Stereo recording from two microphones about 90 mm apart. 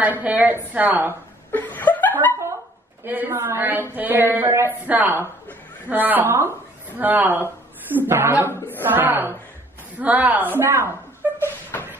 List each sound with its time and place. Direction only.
0.0 s a woman's voice: 15° right (ahead or behind)
1.5 s snicker: 20° left (ahead or behind)
3.0 s a woman's voice: 20° right (ahead or behind)
11.4 s a sound: 25° left (ahead or behind)